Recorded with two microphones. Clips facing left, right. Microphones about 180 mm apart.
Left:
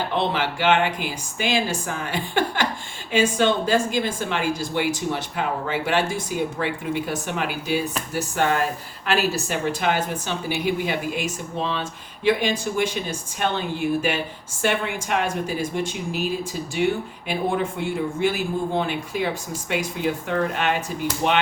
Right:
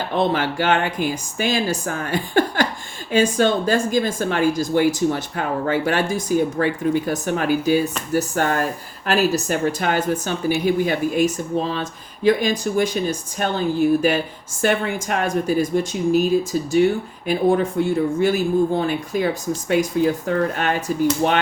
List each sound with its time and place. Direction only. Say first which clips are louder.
0.2 s speech: right 6 dB; 45° right (ahead or behind)